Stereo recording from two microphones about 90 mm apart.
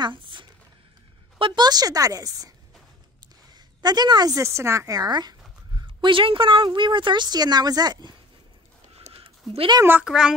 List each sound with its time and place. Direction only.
0.0 s speech: 65° right (ahead or behind); by 2.5 s 40° right (ahead or behind)
3.5 s a woman's voice: 50° right (ahead or behind)
4.4 s a woman's voice: 30° right (ahead or behind); by 5.3 s 50° right (ahead or behind)
5.8 s a woman's voice: 65° right (ahead or behind)
8.9 s a sound: 90° right
10.0 s a child's voice: 10° right (ahead or behind)